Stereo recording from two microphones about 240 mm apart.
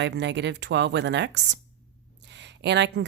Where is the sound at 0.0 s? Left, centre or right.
Right.